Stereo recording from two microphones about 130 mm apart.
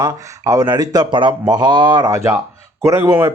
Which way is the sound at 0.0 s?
30° right (ahead or behind).